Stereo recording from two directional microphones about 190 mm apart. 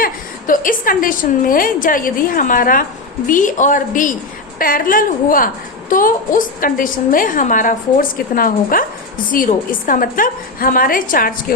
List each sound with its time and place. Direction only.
0.0 s a woman's voice: 45° left (ahead or behind)